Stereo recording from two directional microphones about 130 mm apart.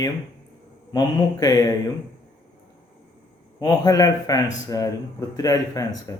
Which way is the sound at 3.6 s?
30° left (ahead or behind).